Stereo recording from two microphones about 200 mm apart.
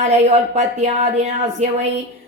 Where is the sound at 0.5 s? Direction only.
35° right (ahead or behind).